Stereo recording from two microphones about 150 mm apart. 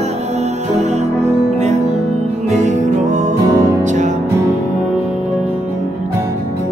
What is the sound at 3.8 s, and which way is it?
Music, 55° right (ahead or behind).